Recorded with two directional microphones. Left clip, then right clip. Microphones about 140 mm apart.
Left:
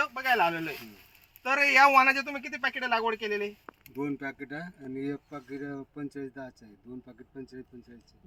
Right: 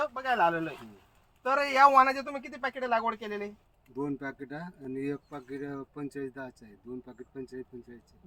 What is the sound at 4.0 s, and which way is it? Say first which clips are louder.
A man's voice: left 1 dB; 25° right (ahead or behind).